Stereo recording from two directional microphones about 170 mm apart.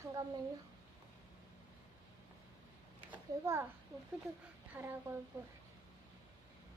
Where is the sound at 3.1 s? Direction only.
15° right (ahead or behind).